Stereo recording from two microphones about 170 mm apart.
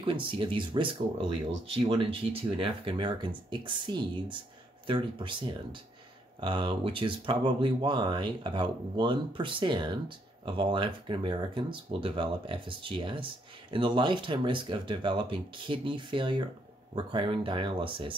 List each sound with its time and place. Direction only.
0.0 s speech: 30° right (ahead or behind)